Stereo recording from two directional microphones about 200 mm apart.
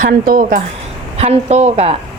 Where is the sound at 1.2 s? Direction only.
30° right (ahead or behind).